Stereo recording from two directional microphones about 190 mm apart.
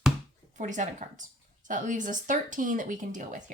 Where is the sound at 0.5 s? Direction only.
40° right (ahead or behind).